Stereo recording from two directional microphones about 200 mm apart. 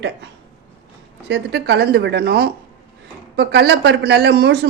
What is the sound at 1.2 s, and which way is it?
A man's voice, 60° right (ahead or behind).